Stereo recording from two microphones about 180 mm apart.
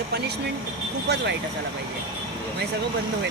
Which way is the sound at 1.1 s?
70° right (ahead or behind).